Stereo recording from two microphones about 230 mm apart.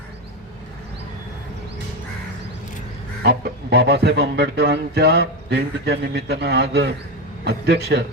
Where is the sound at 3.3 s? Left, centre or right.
Right.